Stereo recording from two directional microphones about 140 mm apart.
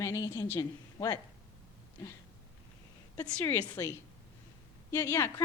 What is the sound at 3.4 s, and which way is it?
Speech, 15° left (ahead or behind).